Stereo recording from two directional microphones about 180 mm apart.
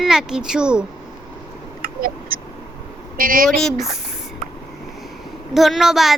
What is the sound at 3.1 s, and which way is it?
Speech, 50° right (ahead or behind).